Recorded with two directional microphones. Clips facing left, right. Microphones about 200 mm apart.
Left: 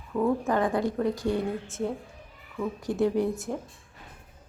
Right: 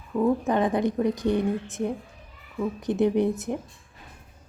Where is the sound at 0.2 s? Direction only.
20° right (ahead or behind).